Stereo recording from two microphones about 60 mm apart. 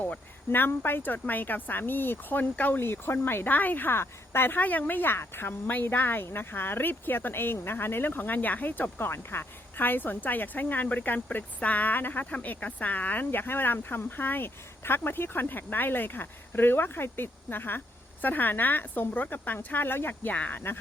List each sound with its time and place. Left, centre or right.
0.5 s speech: left
9.0 s speech: left